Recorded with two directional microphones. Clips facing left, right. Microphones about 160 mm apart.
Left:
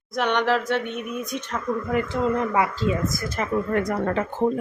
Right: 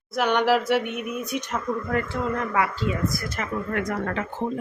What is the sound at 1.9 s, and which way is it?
Speech, 20° left (ahead or behind).